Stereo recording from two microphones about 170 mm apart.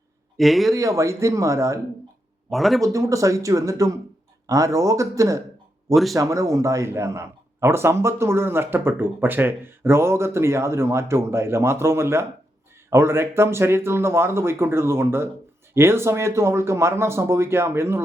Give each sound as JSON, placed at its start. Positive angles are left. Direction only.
{"t": 0.3, "sound": "a man's voice", "side_deg": 0}
{"t": 0.7, "sound": "a man's voice", "side_deg": -20}
{"t": 2.5, "sound": "a man's voice", "side_deg": 0}
{"t": 2.8, "sound": "speech", "side_deg": -20}
{"t": 5.9, "sound": "a man's voice", "side_deg": 0}
{"t": 6.1, "sound": "a man's voice", "side_deg": -20}